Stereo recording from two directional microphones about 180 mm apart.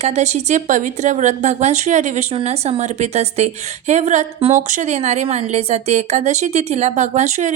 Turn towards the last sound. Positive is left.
turn(degrees=-40)  # may be behind; listen again after turning